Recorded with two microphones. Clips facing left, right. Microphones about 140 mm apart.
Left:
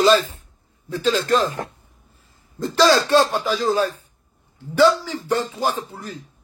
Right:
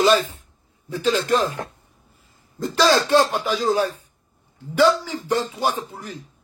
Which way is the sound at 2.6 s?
20° right (ahead or behind).